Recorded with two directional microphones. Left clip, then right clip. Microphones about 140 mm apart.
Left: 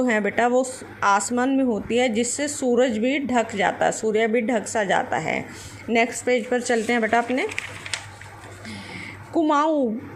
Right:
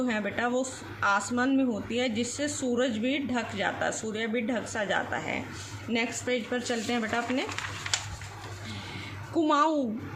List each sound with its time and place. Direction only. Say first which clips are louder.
0.0 s speech: left 9 dB; 50° left (ahead or behind)
1.4 s speech: left 5 dB; 35° left (ahead or behind)
9.3 s a woman's voice: left 4 dB; 40° left (ahead or behind)